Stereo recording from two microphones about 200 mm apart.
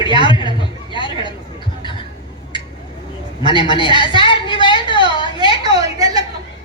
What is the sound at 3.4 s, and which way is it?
A woman's voice, 25° left (ahead or behind).